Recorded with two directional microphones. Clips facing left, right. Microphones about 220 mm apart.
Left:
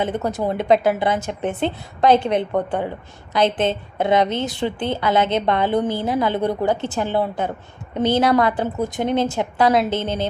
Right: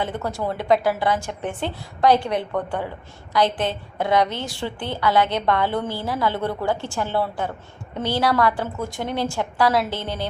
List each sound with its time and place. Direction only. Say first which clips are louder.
0.0 s a woman's voice: left 4 dB; 20° left (ahead or behind)